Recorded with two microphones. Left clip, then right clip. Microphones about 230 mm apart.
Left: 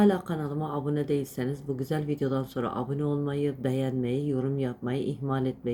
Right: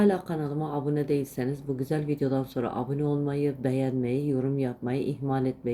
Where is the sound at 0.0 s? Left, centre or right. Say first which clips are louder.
Even; centre.